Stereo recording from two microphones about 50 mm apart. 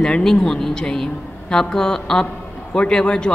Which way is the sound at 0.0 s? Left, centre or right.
Centre.